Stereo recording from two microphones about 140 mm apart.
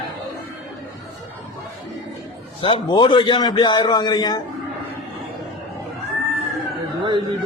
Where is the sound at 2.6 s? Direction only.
40° left (ahead or behind).